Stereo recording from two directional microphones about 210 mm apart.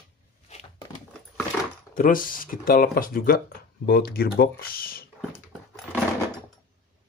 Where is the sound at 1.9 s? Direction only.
40° left (ahead or behind).